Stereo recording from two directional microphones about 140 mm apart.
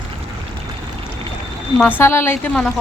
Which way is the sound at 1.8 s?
15° left (ahead or behind).